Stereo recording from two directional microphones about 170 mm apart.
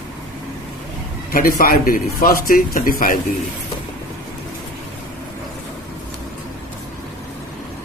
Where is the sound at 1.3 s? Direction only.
55° left (ahead or behind).